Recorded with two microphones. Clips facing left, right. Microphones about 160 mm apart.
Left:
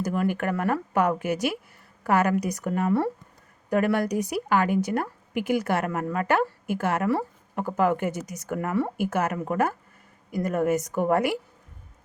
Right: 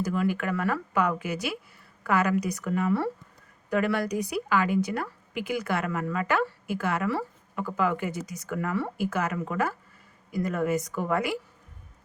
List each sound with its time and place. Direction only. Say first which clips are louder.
0.0 s a woman's voice: left 1 dB; 50° left (ahead or behind)